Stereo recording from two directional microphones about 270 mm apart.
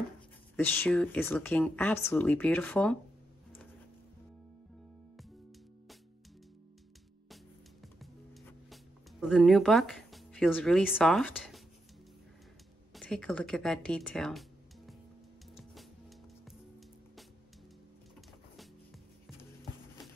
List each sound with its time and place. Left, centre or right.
0.6 s speech: centre
8.0 s music: centre
9.2 s speech: centre
12.9 s speech: centre
15.5 s music: centre